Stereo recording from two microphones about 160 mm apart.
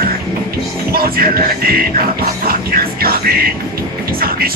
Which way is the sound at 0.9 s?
70° right (ahead or behind).